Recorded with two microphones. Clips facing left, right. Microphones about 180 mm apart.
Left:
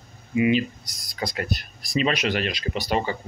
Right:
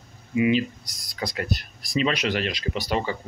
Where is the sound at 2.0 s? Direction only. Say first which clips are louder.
Left 1 dB; 50° left (ahead or behind).